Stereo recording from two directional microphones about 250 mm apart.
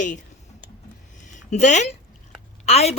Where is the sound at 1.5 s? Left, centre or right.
Left.